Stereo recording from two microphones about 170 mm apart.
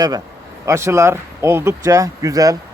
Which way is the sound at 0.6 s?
15° right (ahead or behind).